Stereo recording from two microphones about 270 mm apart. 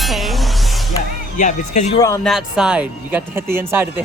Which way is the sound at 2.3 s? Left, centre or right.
Centre.